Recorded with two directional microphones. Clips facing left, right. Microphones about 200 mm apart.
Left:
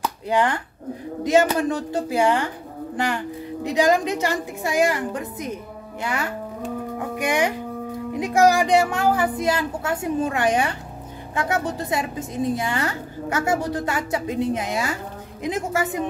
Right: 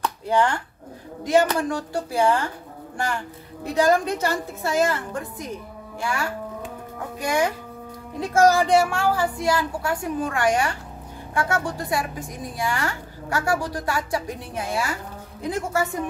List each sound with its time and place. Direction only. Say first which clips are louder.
0.0 s chopping: even; 15° left (ahead or behind)
1.2 s a woman's voice: left 1 dB; 20° left (ahead or behind)
3.6 s a woman's voice: left 1 dB; 15° left (ahead or behind)
7.2 s music: even; 15° left (ahead or behind)
8.1 s a woman's voice: even; 15° left (ahead or behind)